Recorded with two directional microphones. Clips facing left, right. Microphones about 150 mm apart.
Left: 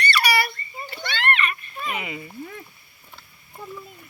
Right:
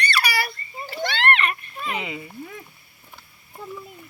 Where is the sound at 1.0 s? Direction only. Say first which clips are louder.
Right 3 dB; 75° right (ahead or behind).